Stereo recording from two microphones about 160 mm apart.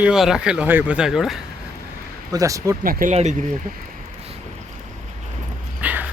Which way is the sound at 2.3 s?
20° right (ahead or behind).